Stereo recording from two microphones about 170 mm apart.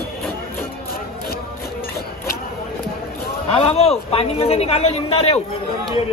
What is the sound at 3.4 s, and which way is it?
A man's voice, 35° left (ahead or behind).